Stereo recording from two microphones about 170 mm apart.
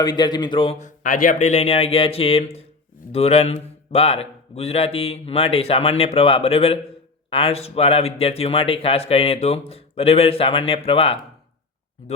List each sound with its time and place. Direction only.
0.0 s a man's voice: 25° left (ahead or behind)
0.8 s speech: 50° left (ahead or behind); by 11.2 s 35° left (ahead or behind)